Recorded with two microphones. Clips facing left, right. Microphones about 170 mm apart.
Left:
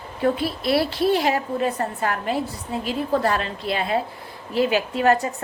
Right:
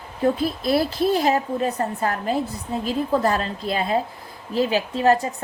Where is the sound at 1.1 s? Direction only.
40° right (ahead or behind).